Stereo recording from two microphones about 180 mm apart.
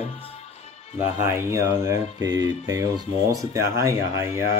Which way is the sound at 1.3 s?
15° right (ahead or behind).